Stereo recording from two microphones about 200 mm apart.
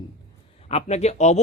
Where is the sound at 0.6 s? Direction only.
30° left (ahead or behind).